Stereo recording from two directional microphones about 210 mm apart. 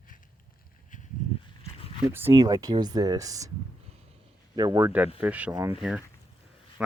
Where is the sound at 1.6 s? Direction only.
25° left (ahead or behind).